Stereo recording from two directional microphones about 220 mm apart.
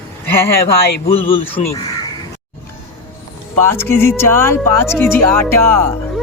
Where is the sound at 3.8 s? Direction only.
10° left (ahead or behind).